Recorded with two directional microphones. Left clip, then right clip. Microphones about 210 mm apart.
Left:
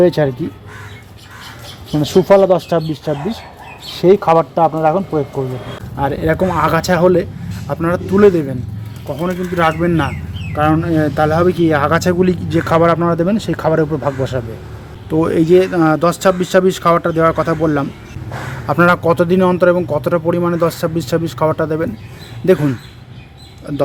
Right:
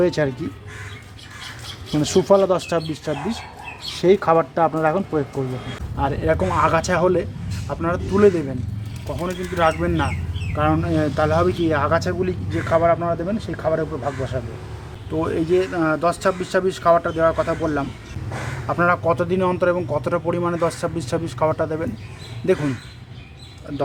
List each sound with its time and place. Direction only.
0.0 s speech: 15° left (ahead or behind)
2.2 s speech: 10° left (ahead or behind)
6.0 s a man's voice: 25° left (ahead or behind)
23.7 s speech: 35° left (ahead or behind)